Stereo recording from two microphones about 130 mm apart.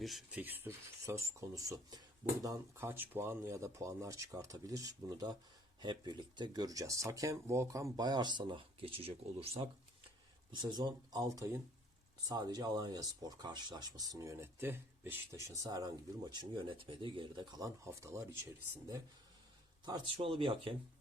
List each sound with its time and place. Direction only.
0.0 s speech: centre (ahead or behind); by 9.6 s 50° right (ahead or behind)
10.5 s speech: 35° right (ahead or behind)
17.8 s speech: 20° right (ahead or behind)
19.8 s speech: 40° right (ahead or behind)